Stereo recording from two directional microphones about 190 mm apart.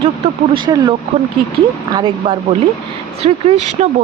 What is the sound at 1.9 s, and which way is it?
Speech, 25° right (ahead or behind).